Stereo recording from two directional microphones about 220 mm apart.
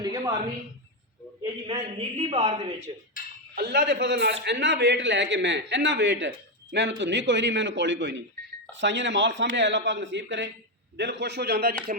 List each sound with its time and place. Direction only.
0.0 s a sound: 20° right (ahead or behind)
1.4 s a man's voice: 20° right (ahead or behind)
3.5 s a man's voice: 45° right (ahead or behind)
11.9 s speech: 35° right (ahead or behind)